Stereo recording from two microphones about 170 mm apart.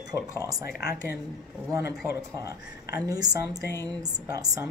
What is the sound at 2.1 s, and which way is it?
Speech, 20° right (ahead or behind).